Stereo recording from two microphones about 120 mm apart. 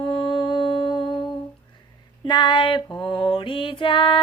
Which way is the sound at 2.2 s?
40° left (ahead or behind).